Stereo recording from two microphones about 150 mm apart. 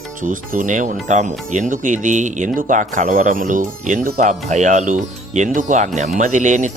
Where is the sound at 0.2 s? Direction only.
60° right (ahead or behind).